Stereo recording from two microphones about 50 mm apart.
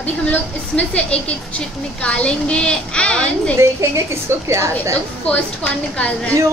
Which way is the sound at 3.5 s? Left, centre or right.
Right.